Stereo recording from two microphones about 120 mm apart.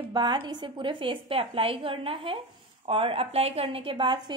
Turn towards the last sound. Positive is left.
turn(degrees=-40)  # may be behind; listen again after turning